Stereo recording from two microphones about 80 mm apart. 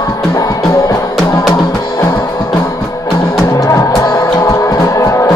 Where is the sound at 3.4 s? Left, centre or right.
Left.